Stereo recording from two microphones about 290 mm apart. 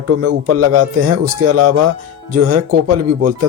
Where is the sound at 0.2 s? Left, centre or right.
Right.